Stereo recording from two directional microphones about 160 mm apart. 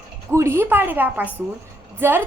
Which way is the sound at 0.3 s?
15° right (ahead or behind).